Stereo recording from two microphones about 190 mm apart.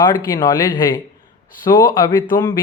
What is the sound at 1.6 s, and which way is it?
Speech, 15° left (ahead or behind).